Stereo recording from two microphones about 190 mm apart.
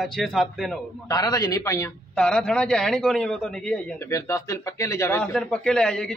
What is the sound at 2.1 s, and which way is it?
Speech, 5° left (ahead or behind).